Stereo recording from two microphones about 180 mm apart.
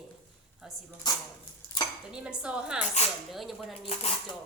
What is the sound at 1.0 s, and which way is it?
Speech, 20° left (ahead or behind).